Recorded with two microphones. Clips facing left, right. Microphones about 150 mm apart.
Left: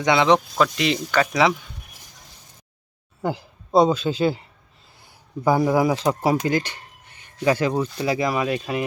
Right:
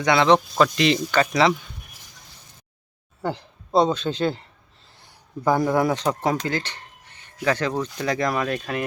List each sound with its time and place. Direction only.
0.0 s speech: 15° left (ahead or behind)
0.3 s speech: centre (ahead or behind)
3.2 s speech: 5° left (ahead or behind)